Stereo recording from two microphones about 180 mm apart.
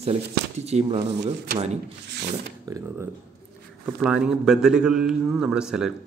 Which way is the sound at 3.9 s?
5° right (ahead or behind).